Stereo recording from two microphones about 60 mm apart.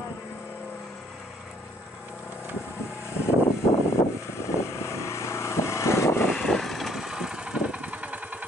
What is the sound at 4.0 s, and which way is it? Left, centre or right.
Vehicle, left.